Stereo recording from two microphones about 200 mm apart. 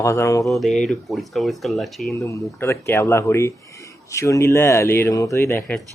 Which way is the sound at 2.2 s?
15° left (ahead or behind).